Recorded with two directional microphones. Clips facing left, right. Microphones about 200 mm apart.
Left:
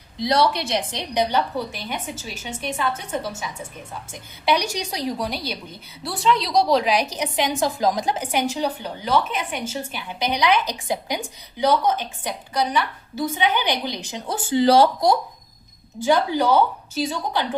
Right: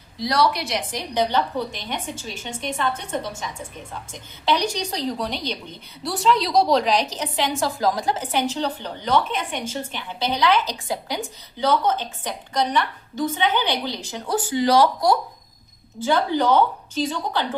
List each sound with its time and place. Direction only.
0.2 s a woman's voice: 25° left (ahead or behind)
14.5 s speech: 30° left (ahead or behind)
16.0 s a woman's voice: 15° left (ahead or behind)